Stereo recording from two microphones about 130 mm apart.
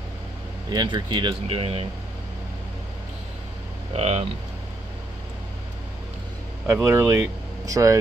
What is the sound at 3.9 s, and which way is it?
Speech, 50° right (ahead or behind).